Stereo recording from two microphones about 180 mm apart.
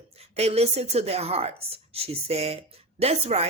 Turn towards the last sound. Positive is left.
turn(degrees=-35)  # may be behind; listen again after turning